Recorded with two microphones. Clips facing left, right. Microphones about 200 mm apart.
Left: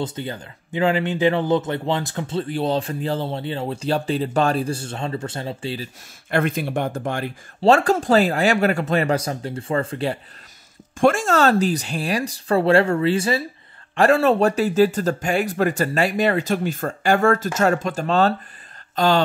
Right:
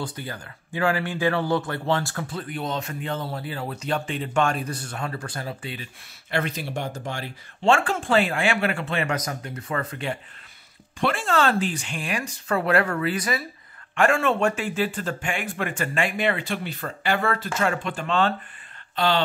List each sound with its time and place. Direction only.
0.0 s speech: 25° left (ahead or behind)
6.3 s speech: 50° left (ahead or behind)
7.6 s speech: 40° left (ahead or behind)
11.0 s speech: 45° left (ahead or behind)